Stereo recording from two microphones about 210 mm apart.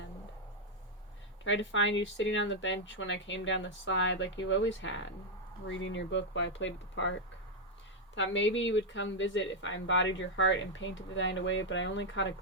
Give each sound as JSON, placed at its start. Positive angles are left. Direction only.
{"t": 1.5, "sound": "speech", "side_deg": 65}